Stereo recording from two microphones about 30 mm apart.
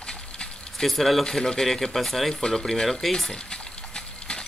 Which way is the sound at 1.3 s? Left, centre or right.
Left.